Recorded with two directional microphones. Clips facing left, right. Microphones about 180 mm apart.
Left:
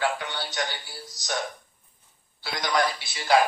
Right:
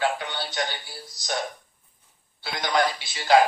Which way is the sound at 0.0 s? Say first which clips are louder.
Right 1 dB; 25° right (ahead or behind).